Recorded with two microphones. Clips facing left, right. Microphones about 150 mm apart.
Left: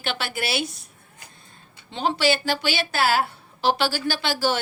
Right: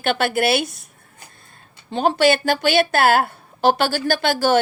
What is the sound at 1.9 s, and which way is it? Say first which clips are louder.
A woman's voice: right 6 dB; 50° right (ahead or behind).